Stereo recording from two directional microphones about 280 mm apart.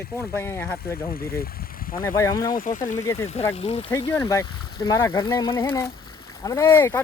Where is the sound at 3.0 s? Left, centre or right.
Centre.